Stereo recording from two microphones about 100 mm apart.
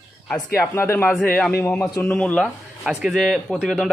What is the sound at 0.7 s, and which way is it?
Speech, 20° left (ahead or behind).